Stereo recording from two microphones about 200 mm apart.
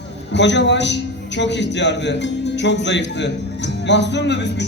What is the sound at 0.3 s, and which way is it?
A man's voice, 60° left (ahead or behind).